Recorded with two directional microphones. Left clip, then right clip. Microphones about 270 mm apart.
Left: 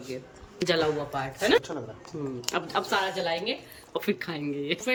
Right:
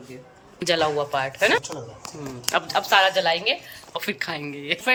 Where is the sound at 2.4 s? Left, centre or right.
Centre.